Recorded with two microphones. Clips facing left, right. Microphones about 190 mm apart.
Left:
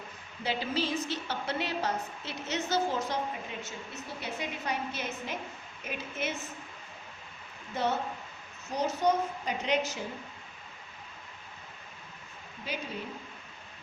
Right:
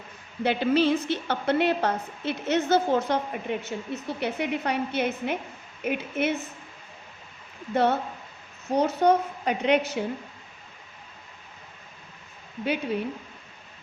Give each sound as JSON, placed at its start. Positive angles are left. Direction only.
{"t": 0.4, "sound": "a woman's voice", "side_deg": -60}
{"t": 7.7, "sound": "a woman's voice", "side_deg": -60}
{"t": 12.6, "sound": "a woman's voice", "side_deg": -65}